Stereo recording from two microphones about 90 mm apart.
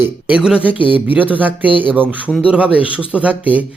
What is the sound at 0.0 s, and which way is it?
Speech, 15° right (ahead or behind).